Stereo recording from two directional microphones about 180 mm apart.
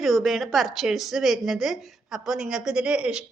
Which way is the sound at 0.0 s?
Centre (ahead or behind).